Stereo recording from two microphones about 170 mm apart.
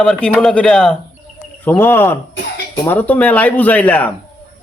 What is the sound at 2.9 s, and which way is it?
Speech, 10° left (ahead or behind).